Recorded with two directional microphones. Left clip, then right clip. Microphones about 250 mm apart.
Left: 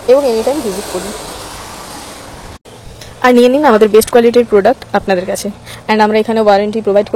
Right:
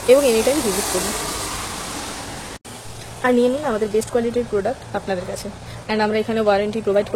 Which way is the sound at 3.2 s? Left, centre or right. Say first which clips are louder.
Left 10 dB; left.